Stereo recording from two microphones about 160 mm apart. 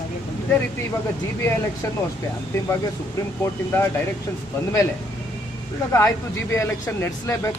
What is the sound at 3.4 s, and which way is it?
Speech, 15° left (ahead or behind).